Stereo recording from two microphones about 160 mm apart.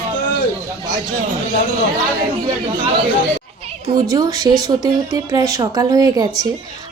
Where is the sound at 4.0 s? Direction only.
25° right (ahead or behind).